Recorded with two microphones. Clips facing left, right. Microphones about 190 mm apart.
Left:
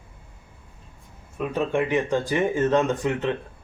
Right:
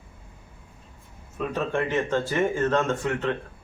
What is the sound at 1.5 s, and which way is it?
Speech, 15° left (ahead or behind).